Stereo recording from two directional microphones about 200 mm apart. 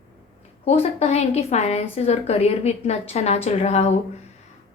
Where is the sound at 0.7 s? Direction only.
30° left (ahead or behind).